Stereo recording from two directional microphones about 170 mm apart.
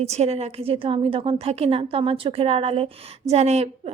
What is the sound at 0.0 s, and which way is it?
A woman's voice, 40° right (ahead or behind).